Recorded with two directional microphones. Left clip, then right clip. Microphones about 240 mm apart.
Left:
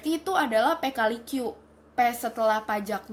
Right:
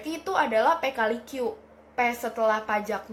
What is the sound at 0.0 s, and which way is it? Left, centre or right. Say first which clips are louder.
A woman's voice: even; left.